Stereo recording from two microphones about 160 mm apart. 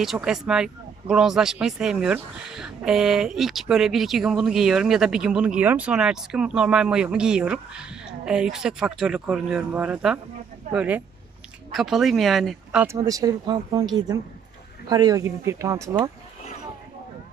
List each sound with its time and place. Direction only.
0.0 s speech: centre (ahead or behind)
12.8 s speech: 20° right (ahead or behind)